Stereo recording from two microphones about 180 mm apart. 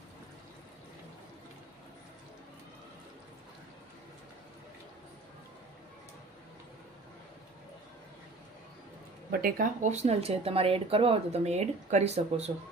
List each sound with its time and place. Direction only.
9.3 s speech: 50° right (ahead or behind); by 12.5 s 35° right (ahead or behind)